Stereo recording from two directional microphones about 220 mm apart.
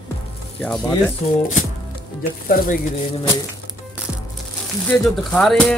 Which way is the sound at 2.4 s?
40° left (ahead or behind).